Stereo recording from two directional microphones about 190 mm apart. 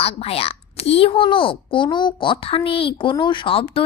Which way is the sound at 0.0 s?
30° left (ahead or behind).